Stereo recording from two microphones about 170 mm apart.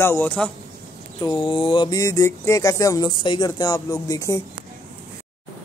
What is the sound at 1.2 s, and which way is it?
Speech, 30° left (ahead or behind).